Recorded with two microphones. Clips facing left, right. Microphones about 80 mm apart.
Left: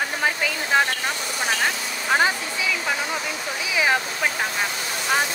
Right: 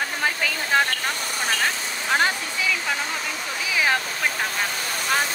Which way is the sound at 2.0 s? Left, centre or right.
Centre.